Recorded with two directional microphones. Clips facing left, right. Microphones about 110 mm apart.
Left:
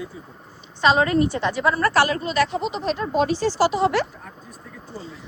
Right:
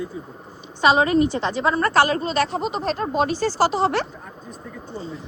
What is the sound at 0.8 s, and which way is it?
A woman's voice, 15° right (ahead or behind).